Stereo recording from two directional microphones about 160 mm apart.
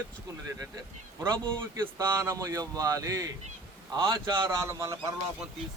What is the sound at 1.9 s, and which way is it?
A man's voice, 20° right (ahead or behind).